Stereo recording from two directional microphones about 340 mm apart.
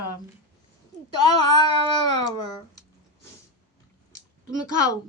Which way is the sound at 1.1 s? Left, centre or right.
Left.